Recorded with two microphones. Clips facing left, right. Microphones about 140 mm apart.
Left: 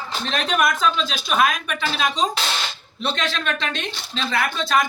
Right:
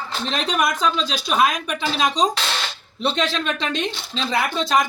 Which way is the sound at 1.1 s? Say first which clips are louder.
Right 1 dB; 30° right (ahead or behind).